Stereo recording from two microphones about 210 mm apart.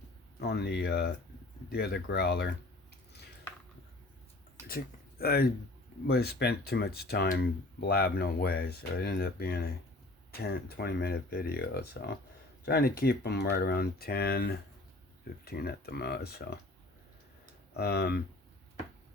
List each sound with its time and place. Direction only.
0.4 s speech: 50° left (ahead or behind)
4.7 s speech: 45° left (ahead or behind)
17.7 s speech: 50° left (ahead or behind)